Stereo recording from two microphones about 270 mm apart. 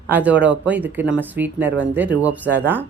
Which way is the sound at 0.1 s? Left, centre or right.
Centre.